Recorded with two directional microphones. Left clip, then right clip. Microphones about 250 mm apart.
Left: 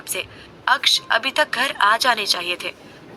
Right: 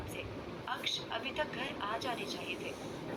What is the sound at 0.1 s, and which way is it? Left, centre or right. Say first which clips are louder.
A woman's voice: left 13 dB; left.